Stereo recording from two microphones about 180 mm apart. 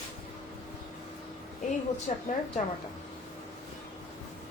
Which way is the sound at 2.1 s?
40° left (ahead or behind).